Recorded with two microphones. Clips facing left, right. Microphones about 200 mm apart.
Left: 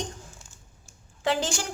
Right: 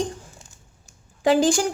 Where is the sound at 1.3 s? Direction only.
10° right (ahead or behind).